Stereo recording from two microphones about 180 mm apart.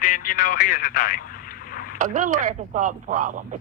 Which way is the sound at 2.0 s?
45° right (ahead or behind).